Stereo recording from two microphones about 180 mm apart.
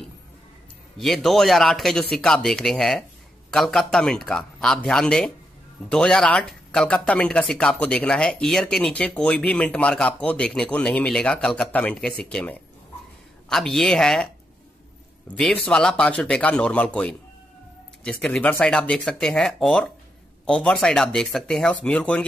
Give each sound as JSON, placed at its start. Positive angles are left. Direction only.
{"t": 0.9, "sound": "speech", "side_deg": 0}
{"t": 15.3, "sound": "speech", "side_deg": 5}